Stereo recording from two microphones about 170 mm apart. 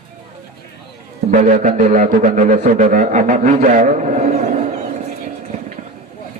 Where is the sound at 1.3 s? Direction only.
45° right (ahead or behind).